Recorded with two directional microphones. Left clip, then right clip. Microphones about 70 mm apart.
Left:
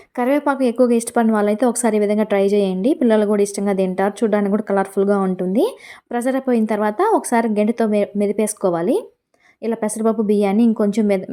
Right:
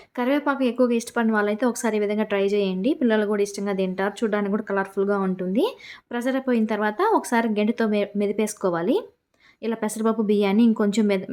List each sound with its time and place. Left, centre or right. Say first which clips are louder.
0.2 s a woman's voice: left 5 dB; left
5.4 s a woman's voice: left 5 dB; left; by 11.1 s centre